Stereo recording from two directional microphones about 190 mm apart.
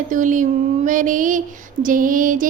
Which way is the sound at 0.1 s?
45° right (ahead or behind).